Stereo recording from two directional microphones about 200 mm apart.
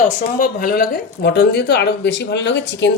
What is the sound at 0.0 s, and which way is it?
Speech, 40° left (ahead or behind).